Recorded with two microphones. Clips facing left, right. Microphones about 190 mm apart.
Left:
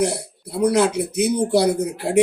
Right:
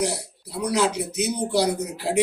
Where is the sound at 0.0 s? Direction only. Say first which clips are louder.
Left 5 dB; 55° left (ahead or behind).